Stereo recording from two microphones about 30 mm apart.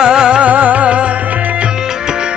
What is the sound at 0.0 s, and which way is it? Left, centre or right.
Music, right.